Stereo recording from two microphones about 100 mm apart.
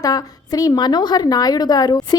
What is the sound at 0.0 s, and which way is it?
A woman's voice, 35° left (ahead or behind).